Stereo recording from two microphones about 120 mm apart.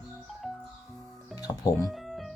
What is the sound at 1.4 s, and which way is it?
Speech, 30° left (ahead or behind).